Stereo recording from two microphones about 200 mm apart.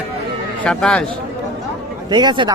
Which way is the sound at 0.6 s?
5° left (ahead or behind).